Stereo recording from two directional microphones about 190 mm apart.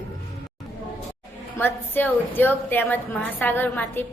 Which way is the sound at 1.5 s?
10° left (ahead or behind).